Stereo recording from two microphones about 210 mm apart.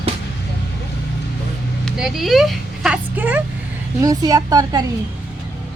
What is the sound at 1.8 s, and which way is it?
A woman's voice, centre (ahead or behind).